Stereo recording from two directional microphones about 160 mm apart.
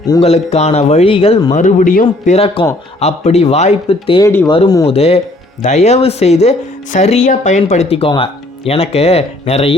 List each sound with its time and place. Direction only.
0.2 s speech: 40° left (ahead or behind)
1.5 s speech: 55° left (ahead or behind)
3.0 s speech: 45° left (ahead or behind)
4.2 s speech: 15° left (ahead or behind)
4.4 s speech: 30° left (ahead or behind)
4.9 s speech: 40° left (ahead or behind)